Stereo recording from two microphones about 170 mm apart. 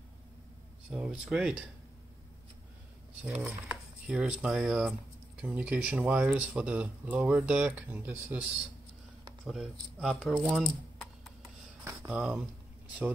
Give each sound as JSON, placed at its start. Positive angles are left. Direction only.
{"t": 0.8, "sound": "speech", "side_deg": -5}
{"t": 3.3, "sound": "speech", "side_deg": -10}
{"t": 9.5, "sound": "speech", "side_deg": 0}
{"t": 10.5, "sound": "typing", "side_deg": 0}
{"t": 11.8, "sound": "a sound", "side_deg": -10}